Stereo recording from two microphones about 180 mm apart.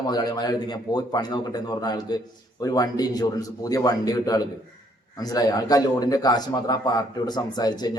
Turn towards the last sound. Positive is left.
turn(degrees=20)  # may be behind; listen again after turning